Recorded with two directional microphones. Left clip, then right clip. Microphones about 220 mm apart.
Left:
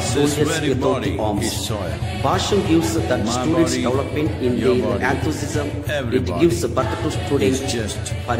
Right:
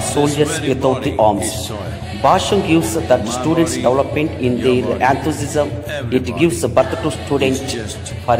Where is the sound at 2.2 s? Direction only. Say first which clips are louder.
Right 6 dB; 20° right (ahead or behind).